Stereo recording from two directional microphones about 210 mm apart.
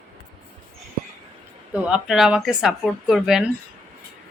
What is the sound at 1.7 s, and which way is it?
Speech, 5° right (ahead or behind).